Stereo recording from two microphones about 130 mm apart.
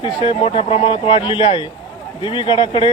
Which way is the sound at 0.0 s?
45° left (ahead or behind).